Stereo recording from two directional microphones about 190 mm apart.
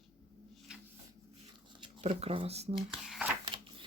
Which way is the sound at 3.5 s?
25° right (ahead or behind).